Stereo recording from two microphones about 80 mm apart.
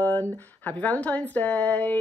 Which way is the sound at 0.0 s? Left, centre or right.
Left.